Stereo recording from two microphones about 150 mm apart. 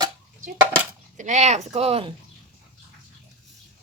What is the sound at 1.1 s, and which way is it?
Speech, 55° right (ahead or behind).